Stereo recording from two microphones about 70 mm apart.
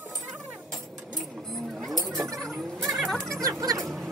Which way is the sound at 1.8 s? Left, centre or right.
Centre.